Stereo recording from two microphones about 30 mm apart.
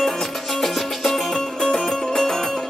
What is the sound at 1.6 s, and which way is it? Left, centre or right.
Music, left.